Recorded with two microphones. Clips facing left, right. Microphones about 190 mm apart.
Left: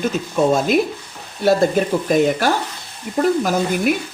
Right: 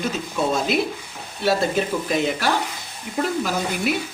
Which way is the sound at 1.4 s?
45° left (ahead or behind).